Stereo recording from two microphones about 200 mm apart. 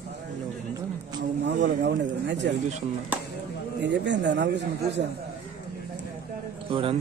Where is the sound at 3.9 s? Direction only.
60° right (ahead or behind).